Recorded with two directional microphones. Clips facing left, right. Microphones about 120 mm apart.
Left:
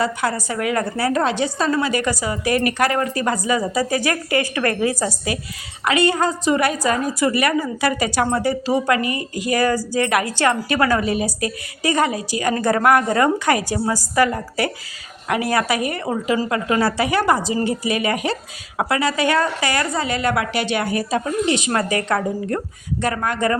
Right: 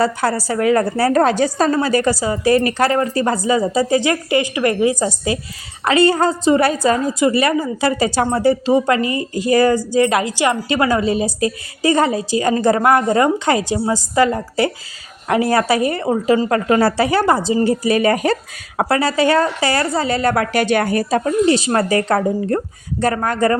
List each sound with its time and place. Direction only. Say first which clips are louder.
0.0 s a woman's voice: right 4 dB; 35° right (ahead or behind)